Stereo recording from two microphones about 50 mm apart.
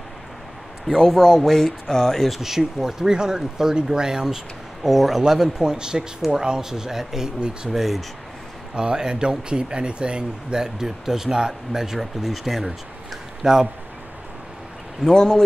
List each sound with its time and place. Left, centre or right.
0.8 s speech: centre
1.1 s speech: centre
7.3 s speech: centre
15.0 s speech: centre